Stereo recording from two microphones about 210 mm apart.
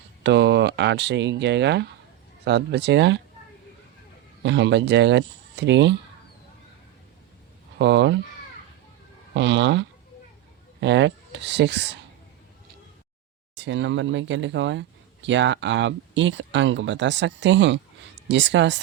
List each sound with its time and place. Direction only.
0.2 s speech: 55° right (ahead or behind)
4.4 s speech: 55° right (ahead or behind)
7.8 s speech: 55° right (ahead or behind)
9.3 s speech: 60° right (ahead or behind)
13.6 s speech: 60° right (ahead or behind)